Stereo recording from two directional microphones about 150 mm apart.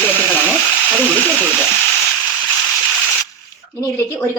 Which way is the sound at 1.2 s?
10° left (ahead or behind).